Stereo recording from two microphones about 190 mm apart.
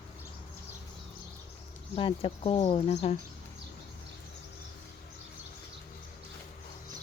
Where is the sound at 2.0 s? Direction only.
30° left (ahead or behind).